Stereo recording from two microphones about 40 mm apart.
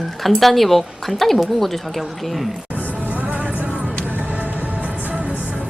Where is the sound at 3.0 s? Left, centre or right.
Right.